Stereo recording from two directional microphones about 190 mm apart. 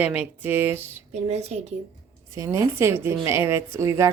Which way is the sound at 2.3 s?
15° right (ahead or behind).